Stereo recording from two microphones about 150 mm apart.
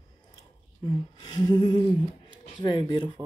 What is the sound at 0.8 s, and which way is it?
Speech, 30° left (ahead or behind).